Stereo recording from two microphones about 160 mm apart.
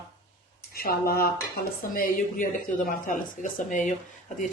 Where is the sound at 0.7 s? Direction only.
70° left (ahead or behind).